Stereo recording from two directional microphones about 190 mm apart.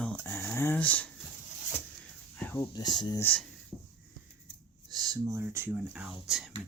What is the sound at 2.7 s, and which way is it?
Speech, 25° left (ahead or behind).